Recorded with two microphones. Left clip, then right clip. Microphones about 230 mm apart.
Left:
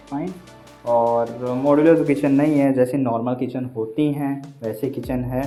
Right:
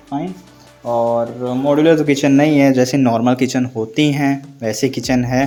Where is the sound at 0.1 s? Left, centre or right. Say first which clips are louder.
Right 4 dB; right.